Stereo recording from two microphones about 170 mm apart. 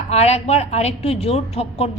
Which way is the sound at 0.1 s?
40° left (ahead or behind).